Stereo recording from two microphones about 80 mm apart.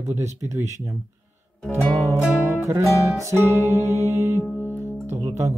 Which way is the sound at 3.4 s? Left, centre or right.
Left.